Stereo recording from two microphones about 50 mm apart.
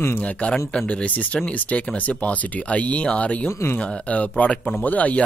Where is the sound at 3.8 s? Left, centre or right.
Left.